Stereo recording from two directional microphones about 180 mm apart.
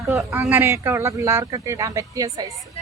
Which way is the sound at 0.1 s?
15° right (ahead or behind).